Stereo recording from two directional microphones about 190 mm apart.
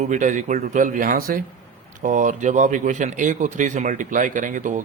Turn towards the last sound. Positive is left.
turn(degrees=-40)  # may be behind; listen again after turning